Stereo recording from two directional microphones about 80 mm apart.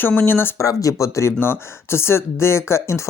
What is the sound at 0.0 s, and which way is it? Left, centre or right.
Speech, left.